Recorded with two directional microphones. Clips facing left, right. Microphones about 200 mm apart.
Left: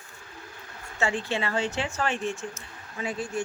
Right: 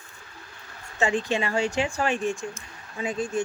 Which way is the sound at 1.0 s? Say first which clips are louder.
Right 3 dB; 15° right (ahead or behind).